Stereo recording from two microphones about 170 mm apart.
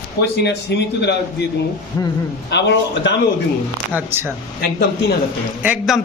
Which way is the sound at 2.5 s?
90° left.